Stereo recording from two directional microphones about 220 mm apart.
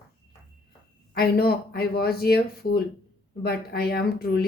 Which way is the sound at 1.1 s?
45° left (ahead or behind).